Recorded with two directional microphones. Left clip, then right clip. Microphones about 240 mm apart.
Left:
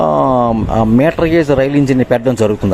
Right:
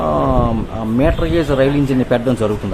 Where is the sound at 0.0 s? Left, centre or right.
Left.